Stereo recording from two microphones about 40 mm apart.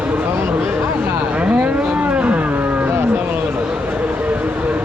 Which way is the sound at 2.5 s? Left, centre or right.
Right.